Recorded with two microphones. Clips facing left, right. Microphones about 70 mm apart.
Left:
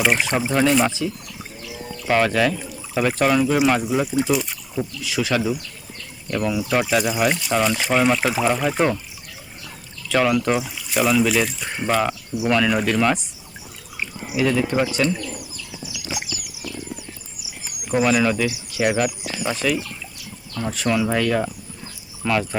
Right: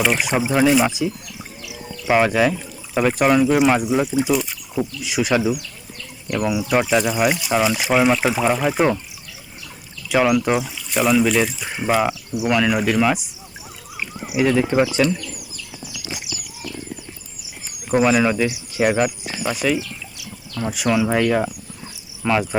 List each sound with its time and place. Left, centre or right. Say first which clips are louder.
0.2 s speech: right 2 dB; centre
0.9 s speech: right 2 dB; centre
1.6 s music: right 2 dB; centre
2.6 s speech: right 2 dB; centre
5.0 s speech: right 2 dB; centre
6.8 s speech: right 2 dB; centre
10.1 s speech: right 2 dB; centre
13.9 s a sound: right 2 dB; centre
14.4 s speech: right 3 dB; centre
18.2 s speech: right 2 dB; centre
18.5 s speech: right 2 dB; centre
19.5 s speech: right 2 dB; centre
22.2 s cricket: right 2 dB; centre